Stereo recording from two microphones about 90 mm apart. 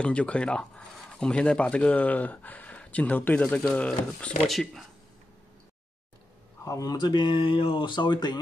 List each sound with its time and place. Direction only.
0.0 s speech: 15° left (ahead or behind)
4.5 s speech: centre (ahead or behind)
6.6 s speech: 40° left (ahead or behind); by 8.4 s 55° left (ahead or behind)